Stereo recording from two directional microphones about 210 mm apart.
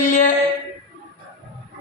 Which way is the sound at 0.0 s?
35° left (ahead or behind).